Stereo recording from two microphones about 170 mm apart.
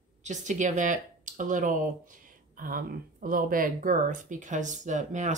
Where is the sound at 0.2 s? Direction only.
45° right (ahead or behind).